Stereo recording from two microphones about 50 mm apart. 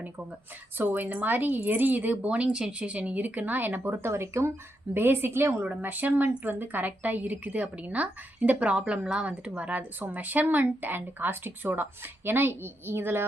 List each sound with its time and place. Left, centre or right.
0.8 s a woman's voice: right
3.9 s speech: right
4.9 s a woman's voice: right
5.5 s a woman's voice: right